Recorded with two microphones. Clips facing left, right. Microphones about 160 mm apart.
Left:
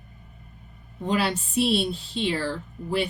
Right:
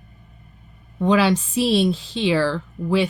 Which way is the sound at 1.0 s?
90° right.